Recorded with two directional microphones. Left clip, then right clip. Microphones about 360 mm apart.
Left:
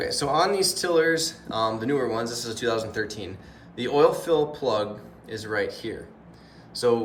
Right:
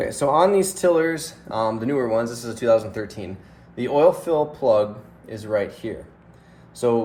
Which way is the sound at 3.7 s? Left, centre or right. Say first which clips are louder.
Right 3 dB; centre.